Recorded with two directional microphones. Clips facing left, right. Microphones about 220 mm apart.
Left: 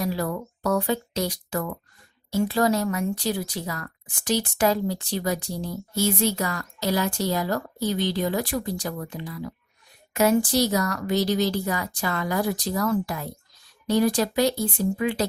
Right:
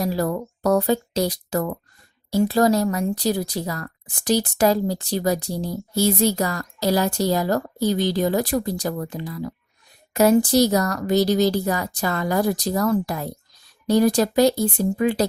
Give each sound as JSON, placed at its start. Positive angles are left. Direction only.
{"t": 0.0, "sound": "speech", "side_deg": -40}